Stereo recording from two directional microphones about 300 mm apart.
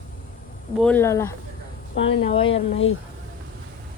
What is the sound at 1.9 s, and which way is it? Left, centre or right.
Speech, left.